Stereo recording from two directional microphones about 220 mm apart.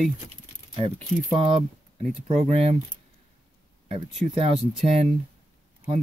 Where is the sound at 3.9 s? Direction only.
25° right (ahead or behind).